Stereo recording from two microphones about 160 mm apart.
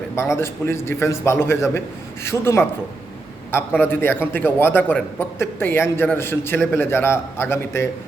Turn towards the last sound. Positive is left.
turn(degrees=15)  # may be behind; listen again after turning